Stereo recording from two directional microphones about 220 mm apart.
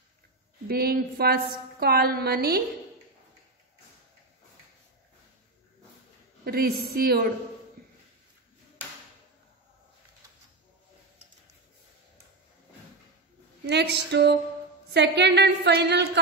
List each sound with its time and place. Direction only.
0.7 s a woman's voice: 45° right (ahead or behind)
6.4 s a woman's voice: 45° right (ahead or behind)
13.7 s a woman's voice: 50° right (ahead or behind)